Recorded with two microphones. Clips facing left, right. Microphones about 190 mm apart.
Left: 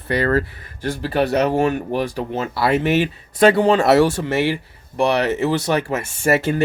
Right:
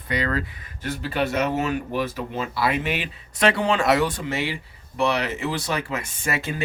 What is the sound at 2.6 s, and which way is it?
Speech, 45° left (ahead or behind).